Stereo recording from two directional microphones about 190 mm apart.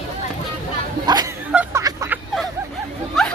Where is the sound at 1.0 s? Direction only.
20° right (ahead or behind).